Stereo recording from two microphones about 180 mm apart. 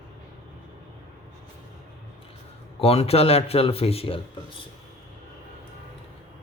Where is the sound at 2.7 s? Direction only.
35° left (ahead or behind).